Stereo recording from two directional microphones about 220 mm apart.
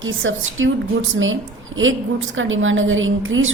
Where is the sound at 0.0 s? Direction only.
60° right (ahead or behind).